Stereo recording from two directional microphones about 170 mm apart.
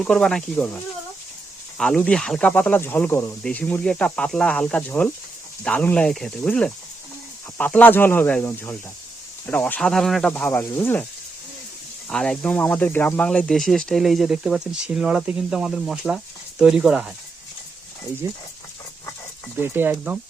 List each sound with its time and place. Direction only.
0.0 s speech: 5° left (ahead or behind)
1.8 s speech: 5° left (ahead or behind)
12.0 s speech: 5° left (ahead or behind)
18.2 s speech: 20° right (ahead or behind)
19.6 s speech: 10° right (ahead or behind)